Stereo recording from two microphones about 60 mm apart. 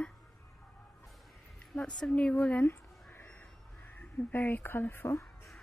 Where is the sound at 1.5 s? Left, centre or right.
Centre.